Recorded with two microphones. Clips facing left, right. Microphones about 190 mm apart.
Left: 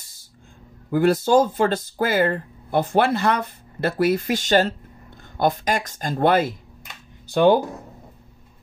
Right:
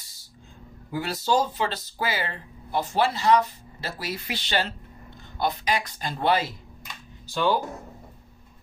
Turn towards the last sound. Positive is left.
turn(degrees=55)  # may be behind; listen again after turning